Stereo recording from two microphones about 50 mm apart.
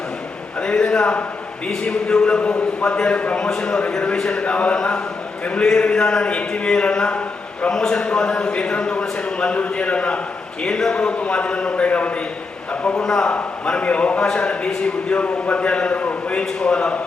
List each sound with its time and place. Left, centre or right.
0.6 s a man's voice: centre
13.0 s speech: centre
13.7 s a man's voice: left